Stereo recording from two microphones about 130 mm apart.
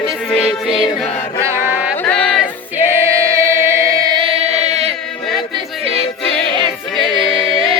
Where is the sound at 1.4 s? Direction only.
15° right (ahead or behind).